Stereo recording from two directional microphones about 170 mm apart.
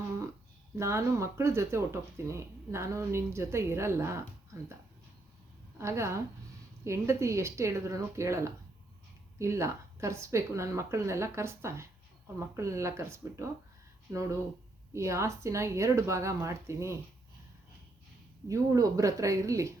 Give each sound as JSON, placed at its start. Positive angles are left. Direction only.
{"t": 0.8, "sound": "speech", "side_deg": -15}
{"t": 5.8, "sound": "speech", "side_deg": -15}
{"t": 14.9, "sound": "speech", "side_deg": -15}
{"t": 18.4, "sound": "speech", "side_deg": -20}